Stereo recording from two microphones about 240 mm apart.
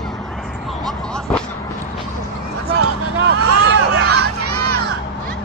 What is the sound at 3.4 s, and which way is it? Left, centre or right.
Hubbub, right.